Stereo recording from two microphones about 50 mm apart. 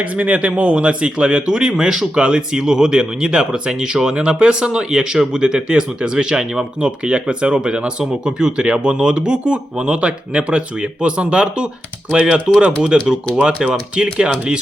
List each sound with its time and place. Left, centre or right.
0.0 s speech: right